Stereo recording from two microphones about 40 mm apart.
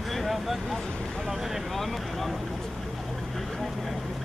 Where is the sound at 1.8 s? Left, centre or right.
Centre.